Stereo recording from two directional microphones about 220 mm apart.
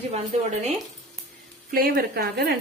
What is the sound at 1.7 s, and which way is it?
Speech, 40° right (ahead or behind).